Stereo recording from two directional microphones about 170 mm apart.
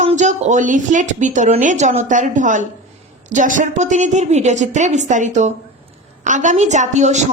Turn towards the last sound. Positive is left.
turn(degrees=-45)  # may be behind; listen again after turning